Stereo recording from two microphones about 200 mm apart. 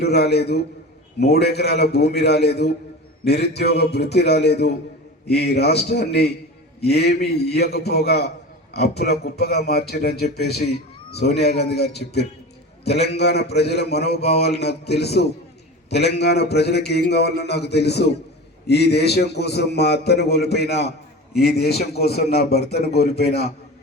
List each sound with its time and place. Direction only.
0.0 s a man's voice: 55° left (ahead or behind)